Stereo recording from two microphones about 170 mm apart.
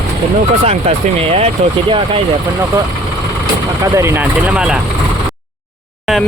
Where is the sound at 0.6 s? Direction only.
35° right (ahead or behind).